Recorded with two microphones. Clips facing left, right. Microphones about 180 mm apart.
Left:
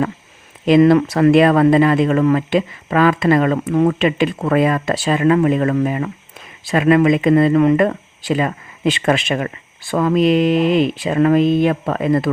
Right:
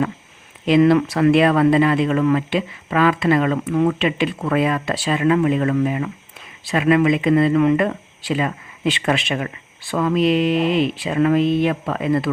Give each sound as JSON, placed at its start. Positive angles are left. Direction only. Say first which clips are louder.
{"t": 0.6, "sound": "speech", "louder": "left 3 dB", "side_deg": 45}